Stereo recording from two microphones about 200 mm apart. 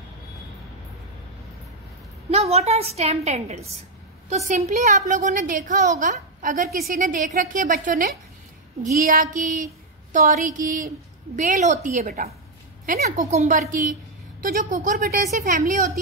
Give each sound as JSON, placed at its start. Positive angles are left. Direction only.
{"t": 2.3, "sound": "a woman's voice", "side_deg": -30}